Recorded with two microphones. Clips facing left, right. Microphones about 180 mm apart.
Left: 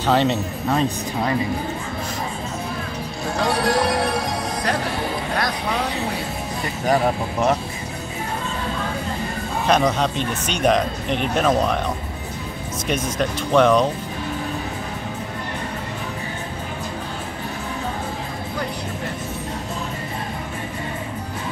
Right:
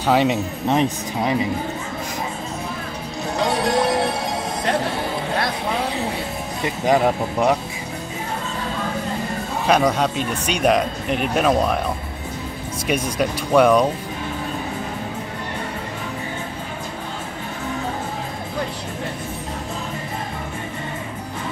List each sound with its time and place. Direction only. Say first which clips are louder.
0.0 s speech: right 1 dB; 10° right (ahead or behind)
3.3 s music: right 1 dB; 20° right (ahead or behind)
6.6 s speech: right 2 dB; 15° right (ahead or behind)
9.7 s speech: right 1 dB; 10° right (ahead or behind)
12.8 s speech: right 2 dB; 10° right (ahead or behind)